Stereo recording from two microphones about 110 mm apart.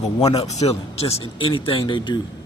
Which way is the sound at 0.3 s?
85° left.